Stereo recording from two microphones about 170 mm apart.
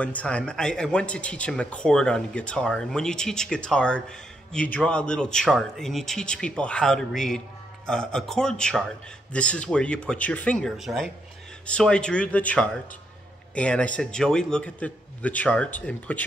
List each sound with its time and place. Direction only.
0.0 s a man's voice: 10° left (ahead or behind)